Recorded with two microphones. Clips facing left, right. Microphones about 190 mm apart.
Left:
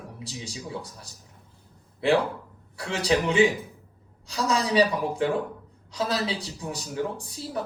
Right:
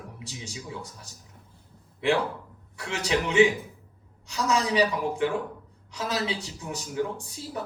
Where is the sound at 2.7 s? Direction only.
35° left (ahead or behind).